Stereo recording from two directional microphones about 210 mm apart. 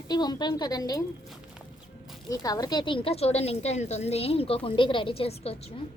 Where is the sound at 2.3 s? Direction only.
15° left (ahead or behind).